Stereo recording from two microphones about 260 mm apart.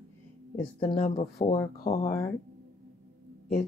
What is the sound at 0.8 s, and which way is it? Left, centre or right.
Speech, centre.